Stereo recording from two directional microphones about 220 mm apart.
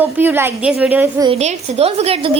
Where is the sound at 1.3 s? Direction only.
30° right (ahead or behind).